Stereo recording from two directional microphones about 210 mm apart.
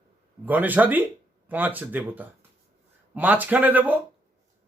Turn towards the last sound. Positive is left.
turn(degrees=-10)  # may be behind; listen again after turning